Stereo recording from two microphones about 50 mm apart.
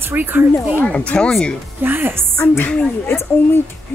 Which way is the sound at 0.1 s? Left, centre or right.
Right.